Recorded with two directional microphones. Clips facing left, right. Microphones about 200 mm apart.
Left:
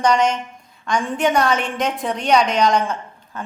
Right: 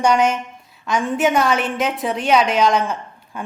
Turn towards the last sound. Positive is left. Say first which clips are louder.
# even
turn(degrees=-5)  # may be behind; listen again after turning